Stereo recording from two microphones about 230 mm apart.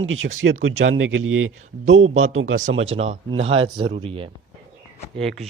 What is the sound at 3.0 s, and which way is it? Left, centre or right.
Speech, right.